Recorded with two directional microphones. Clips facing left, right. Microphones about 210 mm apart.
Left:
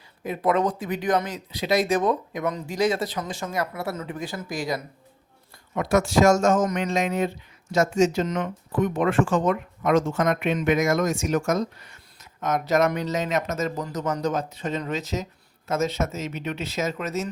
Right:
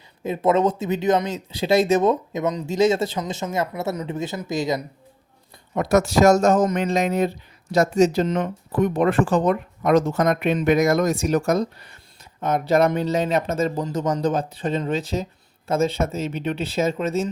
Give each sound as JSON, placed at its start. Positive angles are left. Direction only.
{"t": 0.3, "sound": "speech", "side_deg": -25}
{"t": 5.7, "sound": "speech", "side_deg": -40}